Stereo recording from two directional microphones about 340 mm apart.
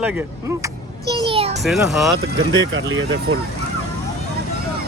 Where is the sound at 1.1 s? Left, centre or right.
Centre.